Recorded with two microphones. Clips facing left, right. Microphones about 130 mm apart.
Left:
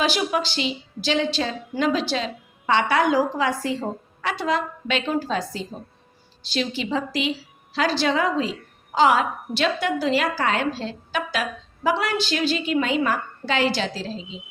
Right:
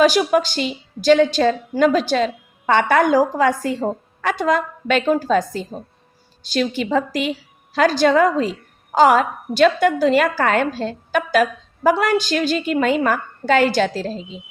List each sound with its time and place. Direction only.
0.0 s a woman's voice: 45° right (ahead or behind)